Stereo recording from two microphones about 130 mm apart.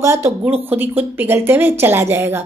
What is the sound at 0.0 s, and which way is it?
A woman's voice, 20° right (ahead or behind).